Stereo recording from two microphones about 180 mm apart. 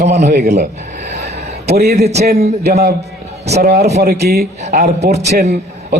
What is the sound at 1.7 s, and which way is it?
A man's voice, 60° right (ahead or behind).